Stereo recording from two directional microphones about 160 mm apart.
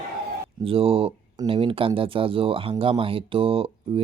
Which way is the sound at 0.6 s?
35° right (ahead or behind).